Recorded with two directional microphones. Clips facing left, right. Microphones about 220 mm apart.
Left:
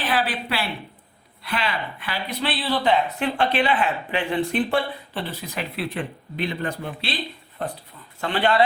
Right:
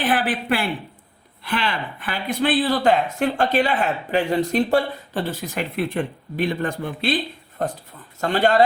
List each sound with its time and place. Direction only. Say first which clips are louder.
0.1 s speech: right 2 dB; 50° right (ahead or behind)